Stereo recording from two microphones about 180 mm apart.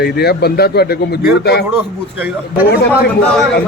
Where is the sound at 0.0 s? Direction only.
65° left (ahead or behind).